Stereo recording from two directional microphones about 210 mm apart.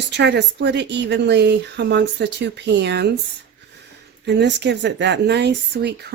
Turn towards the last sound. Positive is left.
turn(degrees=-55)  # may be behind; listen again after turning